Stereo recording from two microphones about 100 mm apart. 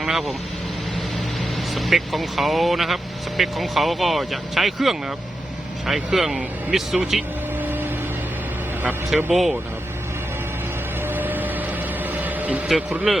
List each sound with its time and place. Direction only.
0.0 s speech: 5° right (ahead or behind)
1.7 s speech: centre (ahead or behind)
7.6 s vehicle: 20° right (ahead or behind)
9.3 s speech: centre (ahead or behind)
11.0 s a sound: 20° right (ahead or behind)
12.1 s vehicle: 15° right (ahead or behind)
13.1 s speech: centre (ahead or behind)